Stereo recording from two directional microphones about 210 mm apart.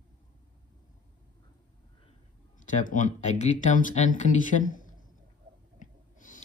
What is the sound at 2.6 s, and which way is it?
Speech, 35° left (ahead or behind).